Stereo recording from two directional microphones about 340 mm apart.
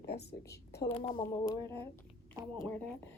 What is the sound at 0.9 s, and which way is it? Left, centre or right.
Speech, centre.